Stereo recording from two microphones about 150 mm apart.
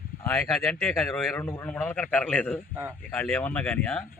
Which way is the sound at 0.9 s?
Centre (ahead or behind).